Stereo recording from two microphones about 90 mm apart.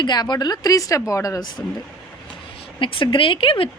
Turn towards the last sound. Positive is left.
turn(degrees=80)